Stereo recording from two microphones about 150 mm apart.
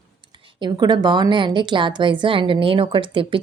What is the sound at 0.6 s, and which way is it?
A woman's voice, 30° right (ahead or behind).